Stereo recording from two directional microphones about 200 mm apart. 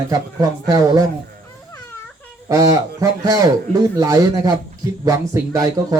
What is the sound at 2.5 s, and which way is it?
Speech, 15° right (ahead or behind).